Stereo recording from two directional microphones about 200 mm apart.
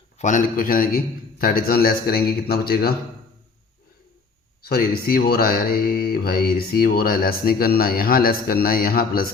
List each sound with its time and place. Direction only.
0.2 s speech: 40° left (ahead or behind)
4.6 s speech: 50° left (ahead or behind)